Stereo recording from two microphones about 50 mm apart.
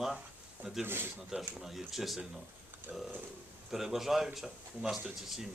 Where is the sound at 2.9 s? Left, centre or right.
Right.